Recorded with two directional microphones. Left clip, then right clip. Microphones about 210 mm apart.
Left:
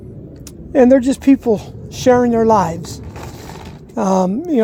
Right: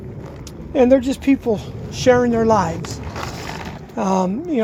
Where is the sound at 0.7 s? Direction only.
45° left (ahead or behind).